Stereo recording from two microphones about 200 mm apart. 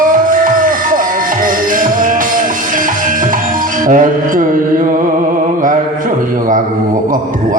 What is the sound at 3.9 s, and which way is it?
Speech, 40° right (ahead or behind).